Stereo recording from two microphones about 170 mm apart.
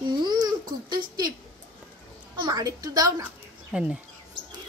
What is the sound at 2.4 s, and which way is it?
Speech, 25° right (ahead or behind).